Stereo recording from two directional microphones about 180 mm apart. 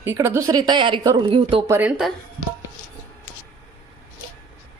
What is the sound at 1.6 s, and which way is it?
Speech, 15° right (ahead or behind).